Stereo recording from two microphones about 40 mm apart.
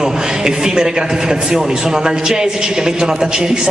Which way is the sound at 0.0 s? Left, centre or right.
Centre.